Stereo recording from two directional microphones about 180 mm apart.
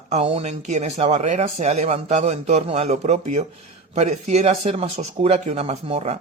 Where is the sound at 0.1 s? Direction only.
35° right (ahead or behind).